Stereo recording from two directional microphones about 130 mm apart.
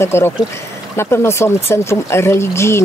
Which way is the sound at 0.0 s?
20° left (ahead or behind).